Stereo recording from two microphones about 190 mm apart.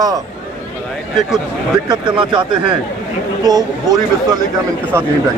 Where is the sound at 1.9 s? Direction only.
25° right (ahead or behind).